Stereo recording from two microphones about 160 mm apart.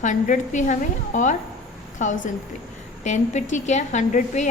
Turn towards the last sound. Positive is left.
turn(degrees=50)  # may be behind; listen again after turning